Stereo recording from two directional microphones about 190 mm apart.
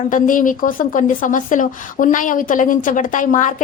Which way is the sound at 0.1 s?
45° left (ahead or behind).